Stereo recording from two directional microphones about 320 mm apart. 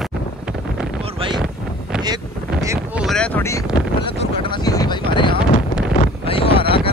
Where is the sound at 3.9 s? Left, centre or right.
Centre.